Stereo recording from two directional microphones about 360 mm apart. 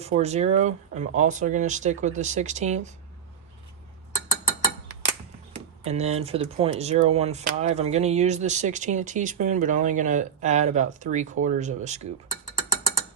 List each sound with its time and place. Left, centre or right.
0.0 s speech: centre
5.5 s speech: centre